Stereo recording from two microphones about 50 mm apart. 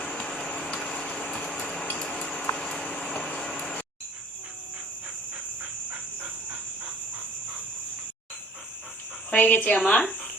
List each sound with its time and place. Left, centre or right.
0.0 s vehicle: centre
0.9 s vehicle: left
1.5 s a sound: centre
2.6 s vehicle: centre
9.3 s a woman's voice: left
9.8 s a woman's voice: centre